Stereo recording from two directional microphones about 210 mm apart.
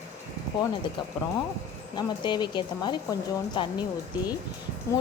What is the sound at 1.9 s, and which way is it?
A woman's voice, 20° left (ahead or behind).